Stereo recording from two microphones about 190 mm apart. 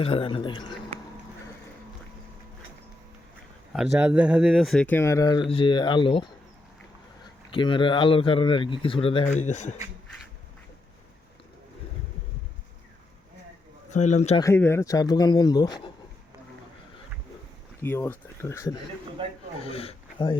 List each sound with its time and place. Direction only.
0.0 s speech: 30° left (ahead or behind)
3.9 s speech: 5° right (ahead or behind); by 6.2 s 25° left (ahead or behind)
7.5 s speech: 25° left (ahead or behind)
13.9 s speech: 35° left (ahead or behind)
14.4 s speech: 15° left (ahead or behind)
17.8 s speech: 10° left (ahead or behind)
19.2 s speech: 25° right (ahead or behind)
19.6 s speech: 30° left (ahead or behind)